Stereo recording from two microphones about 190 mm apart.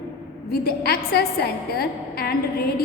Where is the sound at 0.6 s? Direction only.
55° left (ahead or behind).